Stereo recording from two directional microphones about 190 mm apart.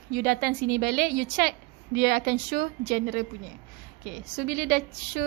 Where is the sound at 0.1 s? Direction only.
55° right (ahead or behind).